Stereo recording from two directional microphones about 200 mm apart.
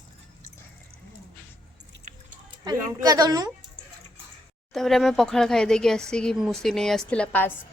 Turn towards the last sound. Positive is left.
turn(degrees=5)  # may be behind; listen again after turning